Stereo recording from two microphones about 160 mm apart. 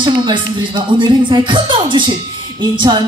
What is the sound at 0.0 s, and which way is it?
Speech, 30° right (ahead or behind).